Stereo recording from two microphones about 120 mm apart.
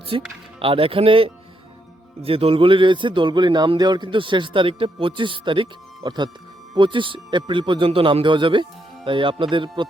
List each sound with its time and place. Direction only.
0.1 s speech: 45° right (ahead or behind)